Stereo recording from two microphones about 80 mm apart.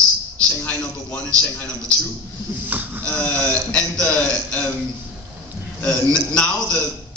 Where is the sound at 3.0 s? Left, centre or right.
Centre.